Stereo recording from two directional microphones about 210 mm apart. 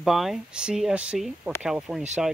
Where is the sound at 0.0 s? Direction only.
Centre (ahead or behind).